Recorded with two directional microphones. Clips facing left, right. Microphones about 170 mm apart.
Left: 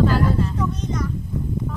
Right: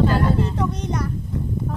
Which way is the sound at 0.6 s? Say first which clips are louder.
Right 1 dB; 65° right (ahead or behind).